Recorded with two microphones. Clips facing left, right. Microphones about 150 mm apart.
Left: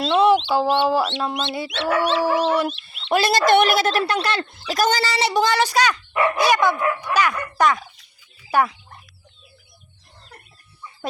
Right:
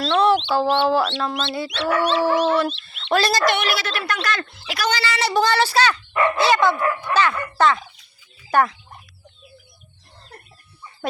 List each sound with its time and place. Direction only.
0.1 s chicken: 15° left (ahead or behind)
0.4 s speech: 10° left (ahead or behind)
2.5 s fowl: 15° left (ahead or behind)
3.1 s speech: 20° left (ahead or behind)
3.4 s speech: 50° left (ahead or behind)
4.0 s speech: 30° left (ahead or behind)
4.5 s speech: 45° left (ahead or behind)
5.2 s speech: 15° left (ahead or behind)
6.7 s speech: centre (ahead or behind)
7.1 s speech: 10° left (ahead or behind)